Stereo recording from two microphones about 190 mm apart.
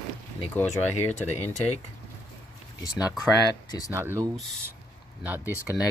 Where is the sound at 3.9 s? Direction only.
15° right (ahead or behind).